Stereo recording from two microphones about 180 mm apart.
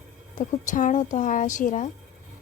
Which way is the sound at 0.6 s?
45° left (ahead or behind).